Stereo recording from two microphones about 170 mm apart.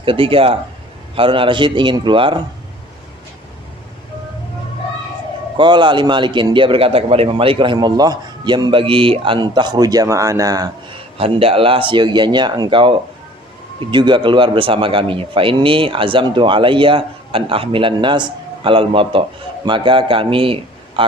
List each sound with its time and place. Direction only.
0.0 s speech: 30° right (ahead or behind)
5.5 s speech: 25° right (ahead or behind)
11.2 s a man's voice: 35° right (ahead or behind)